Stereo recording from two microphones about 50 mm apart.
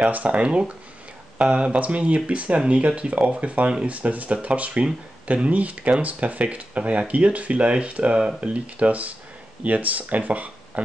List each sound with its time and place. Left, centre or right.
0.0 s speech: right